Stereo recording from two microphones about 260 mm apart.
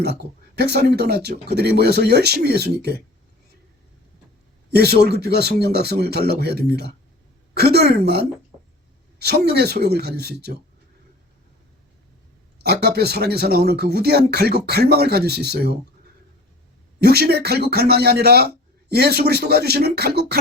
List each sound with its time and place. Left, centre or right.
0.0 s a man's voice: right
4.7 s a man's voice: right
13.0 s a man's voice: right
17.0 s a man's voice: right